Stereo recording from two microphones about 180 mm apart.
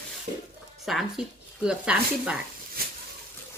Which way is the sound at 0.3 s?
40° right (ahead or behind).